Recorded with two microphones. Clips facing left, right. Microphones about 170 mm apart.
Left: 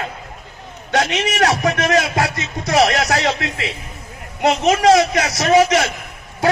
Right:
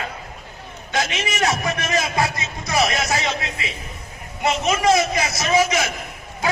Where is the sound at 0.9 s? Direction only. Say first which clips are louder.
Left 6 dB; 65° left (ahead or behind).